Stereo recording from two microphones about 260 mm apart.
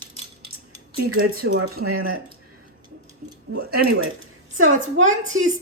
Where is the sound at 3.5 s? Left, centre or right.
Right.